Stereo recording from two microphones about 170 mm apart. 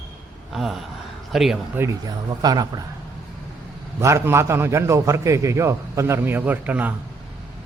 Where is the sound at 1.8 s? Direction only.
15° right (ahead or behind).